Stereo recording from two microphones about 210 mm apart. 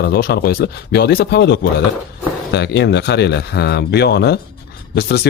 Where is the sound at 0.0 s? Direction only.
50° left (ahead or behind).